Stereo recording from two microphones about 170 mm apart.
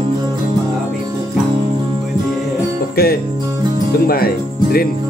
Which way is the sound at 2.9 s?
65° left (ahead or behind).